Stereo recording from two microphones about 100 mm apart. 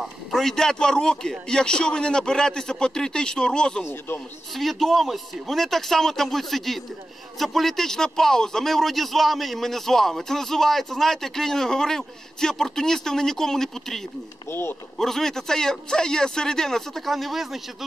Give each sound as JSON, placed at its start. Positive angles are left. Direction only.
{"t": 0.0, "sound": "a man's voice", "side_deg": 0}
{"t": 14.5, "sound": "speech", "side_deg": 20}
{"t": 15.0, "sound": "a man's voice", "side_deg": 5}